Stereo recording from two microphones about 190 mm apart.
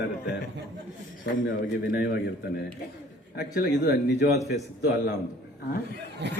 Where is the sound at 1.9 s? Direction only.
65° left (ahead or behind).